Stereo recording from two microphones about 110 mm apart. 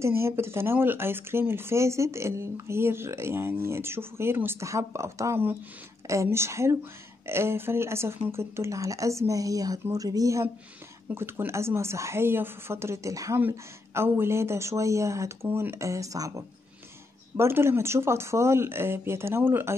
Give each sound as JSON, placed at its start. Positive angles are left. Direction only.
{"t": 0.0, "sound": "speech", "side_deg": -25}